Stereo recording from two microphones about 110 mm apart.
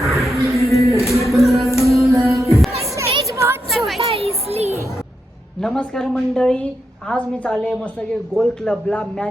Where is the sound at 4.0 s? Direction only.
60° right (ahead or behind).